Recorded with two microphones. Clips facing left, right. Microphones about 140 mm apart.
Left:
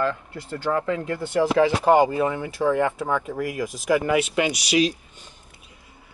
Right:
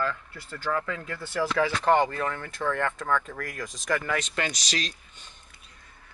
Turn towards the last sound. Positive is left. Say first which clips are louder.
# left 11 dB
turn(degrees=10)  # may be behind; listen again after turning